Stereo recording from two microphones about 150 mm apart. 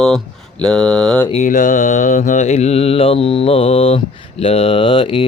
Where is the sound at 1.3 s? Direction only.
55° left (ahead or behind).